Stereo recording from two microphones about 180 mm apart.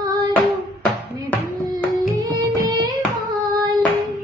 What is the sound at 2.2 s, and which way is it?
Music, 20° right (ahead or behind).